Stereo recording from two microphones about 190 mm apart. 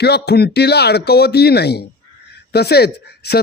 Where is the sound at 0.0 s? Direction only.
60° left (ahead or behind).